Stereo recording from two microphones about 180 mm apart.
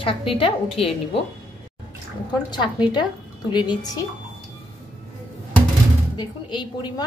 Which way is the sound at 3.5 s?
25° left (ahead or behind).